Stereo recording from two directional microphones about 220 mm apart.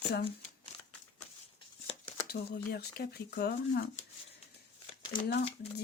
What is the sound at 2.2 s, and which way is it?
Speech, 45° left (ahead or behind).